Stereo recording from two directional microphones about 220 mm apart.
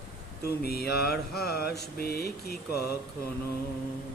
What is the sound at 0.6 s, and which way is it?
A man's voice, 45° left (ahead or behind).